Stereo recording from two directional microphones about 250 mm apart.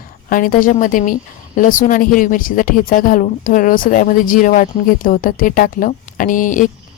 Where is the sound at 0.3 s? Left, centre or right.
Left.